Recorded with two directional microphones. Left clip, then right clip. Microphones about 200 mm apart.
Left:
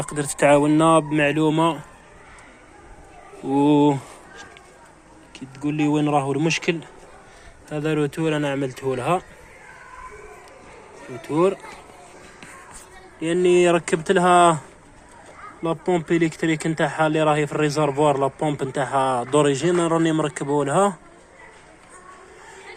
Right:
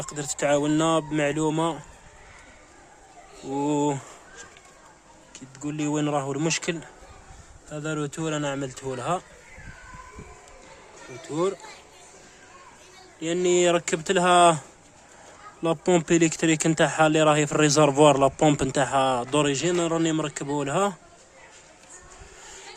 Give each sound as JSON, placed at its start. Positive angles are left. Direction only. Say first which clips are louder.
{"t": 0.0, "sound": "speech", "louder": "left 8 dB", "side_deg": 0}
{"t": 3.5, "sound": "speech", "louder": "left 7 dB", "side_deg": 5}
{"t": 11.2, "sound": "speech", "louder": "left 7 dB", "side_deg": 0}
{"t": 13.1, "sound": "speech", "louder": "left 5 dB", "side_deg": -20}
{"t": 14.0, "sound": "speech", "louder": "left 2 dB", "side_deg": -30}
{"t": 15.6, "sound": "speech", "louder": "even", "side_deg": -45}
{"t": 18.3, "sound": "speech", "louder": "right 2 dB", "side_deg": -55}
{"t": 18.9, "sound": "speech", "louder": "left 6 dB", "side_deg": -35}
{"t": 19.5, "sound": "speech", "louder": "left 4 dB", "side_deg": -10}
{"t": 20.1, "sound": "speech", "louder": "left 5 dB", "side_deg": -25}